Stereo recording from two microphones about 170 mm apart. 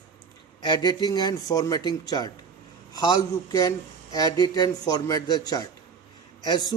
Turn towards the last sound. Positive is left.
turn(degrees=25)  # may be behind; listen again after turning